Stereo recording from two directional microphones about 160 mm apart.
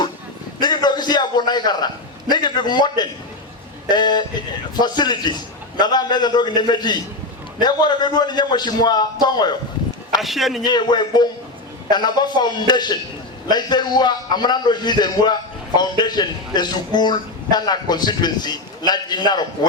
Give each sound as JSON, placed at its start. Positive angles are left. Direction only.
{"t": 0.6, "sound": "a sound", "side_deg": 25}
{"t": 2.3, "sound": "a man's voice", "side_deg": 25}
{"t": 10.2, "sound": "speech", "side_deg": 0}
{"t": 10.6, "sound": "a man's voice", "side_deg": 25}